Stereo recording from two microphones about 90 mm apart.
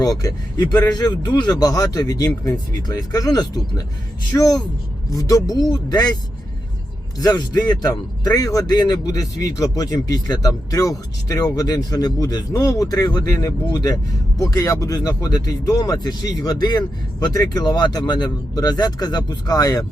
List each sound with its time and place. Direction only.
0.0 s speech: 40° left (ahead or behind)
7.2 s speech: 45° left (ahead or behind)